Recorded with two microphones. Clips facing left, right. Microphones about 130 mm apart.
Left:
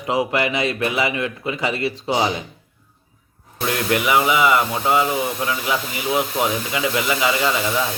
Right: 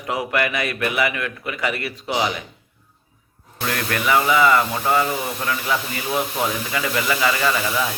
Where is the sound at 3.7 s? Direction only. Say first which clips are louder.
Left 2 dB; 20° left (ahead or behind).